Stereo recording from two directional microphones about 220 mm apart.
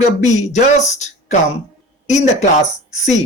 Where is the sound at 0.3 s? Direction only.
30° left (ahead or behind).